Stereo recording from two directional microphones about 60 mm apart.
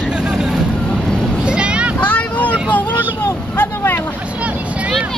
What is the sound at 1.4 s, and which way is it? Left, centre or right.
Vehicle, centre.